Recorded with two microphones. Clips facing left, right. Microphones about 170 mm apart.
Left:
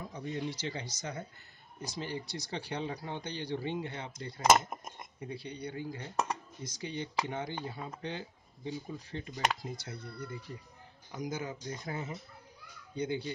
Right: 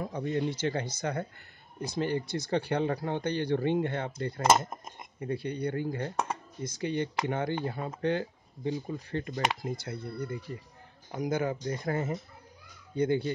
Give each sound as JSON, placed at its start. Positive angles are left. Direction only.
{"t": 0.0, "sound": "speech", "side_deg": -60}